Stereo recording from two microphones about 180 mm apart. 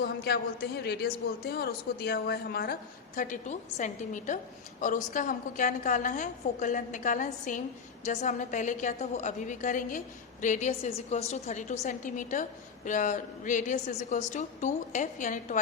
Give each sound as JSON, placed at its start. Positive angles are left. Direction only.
{"t": 0.0, "sound": "a woman's voice", "side_deg": 65}
{"t": 3.2, "sound": "a woman's voice", "side_deg": 45}